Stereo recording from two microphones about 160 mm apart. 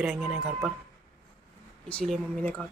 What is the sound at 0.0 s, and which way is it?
Speech, 5° right (ahead or behind).